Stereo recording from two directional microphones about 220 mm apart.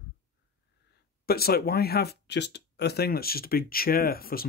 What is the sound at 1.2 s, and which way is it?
Speech, 45° left (ahead or behind).